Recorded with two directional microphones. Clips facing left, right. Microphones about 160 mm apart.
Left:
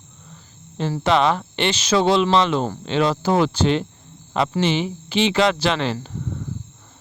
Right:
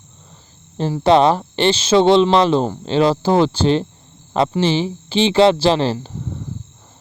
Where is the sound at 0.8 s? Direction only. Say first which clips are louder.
Right 5 dB; 35° right (ahead or behind).